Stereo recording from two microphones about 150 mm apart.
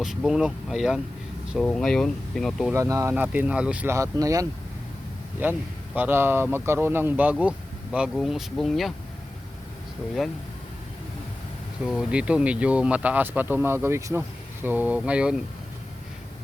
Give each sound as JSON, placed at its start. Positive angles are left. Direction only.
{"t": 0.0, "sound": "speech", "side_deg": 0}
{"t": 2.7, "sound": "speech", "side_deg": -20}
{"t": 3.9, "sound": "speech", "side_deg": -20}
{"t": 11.9, "sound": "speech", "side_deg": -5}